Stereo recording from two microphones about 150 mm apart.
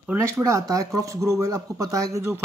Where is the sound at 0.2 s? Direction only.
20° right (ahead or behind).